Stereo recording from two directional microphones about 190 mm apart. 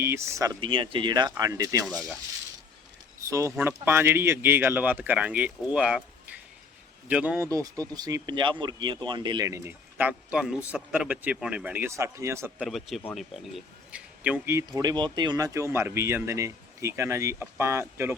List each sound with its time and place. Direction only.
0.0 s speech: 15° right (ahead or behind)
1.9 s speech: centre (ahead or behind)
3.2 s speech: 15° right (ahead or behind)
12.6 s speech: centre (ahead or behind)
14.7 s speech: 20° right (ahead or behind)